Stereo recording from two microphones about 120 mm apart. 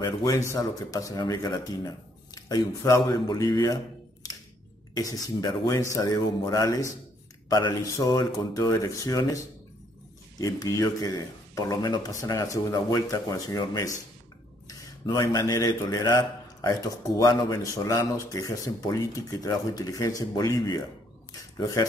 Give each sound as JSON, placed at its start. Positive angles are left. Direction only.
{"t": 0.2, "sound": "a man's voice", "side_deg": 25}
{"t": 10.4, "sound": "a man's voice", "side_deg": 30}